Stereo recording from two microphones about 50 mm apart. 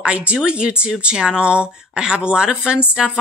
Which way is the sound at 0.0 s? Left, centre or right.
Right.